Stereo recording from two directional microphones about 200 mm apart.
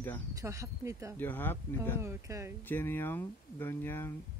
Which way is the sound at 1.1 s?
10° left (ahead or behind).